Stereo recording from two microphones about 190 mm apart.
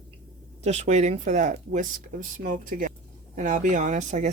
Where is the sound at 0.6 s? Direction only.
35° right (ahead or behind).